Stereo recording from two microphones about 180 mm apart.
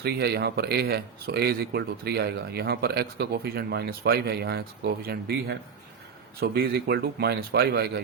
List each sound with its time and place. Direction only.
0.0 s speech: 65° right (ahead or behind)